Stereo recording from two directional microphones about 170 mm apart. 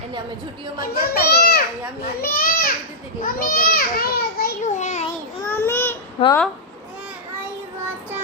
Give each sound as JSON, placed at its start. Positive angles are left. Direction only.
{"t": 0.8, "sound": "a child's voice", "side_deg": 65}
{"t": 4.6, "sound": "a child's voice", "side_deg": 45}
{"t": 5.5, "sound": "a sound", "side_deg": 15}
{"t": 6.2, "sound": "speech", "side_deg": 35}